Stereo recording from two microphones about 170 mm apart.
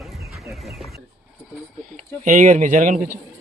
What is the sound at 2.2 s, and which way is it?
Speech, 45° right (ahead or behind).